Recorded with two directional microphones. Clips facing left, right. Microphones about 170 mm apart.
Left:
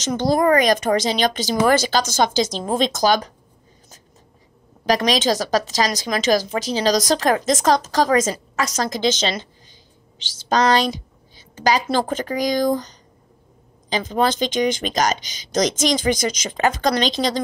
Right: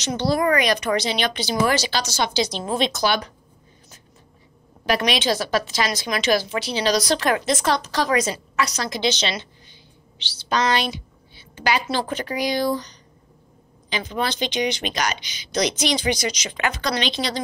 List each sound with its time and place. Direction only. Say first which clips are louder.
0.0 s speech: left 3 dB; 45° left (ahead or behind)
4.8 s a woman's voice: left 3 dB; 40° left (ahead or behind)